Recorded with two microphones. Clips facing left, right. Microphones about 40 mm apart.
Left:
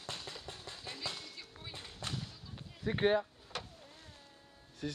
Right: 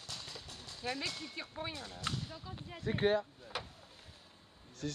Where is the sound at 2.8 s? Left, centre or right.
Centre.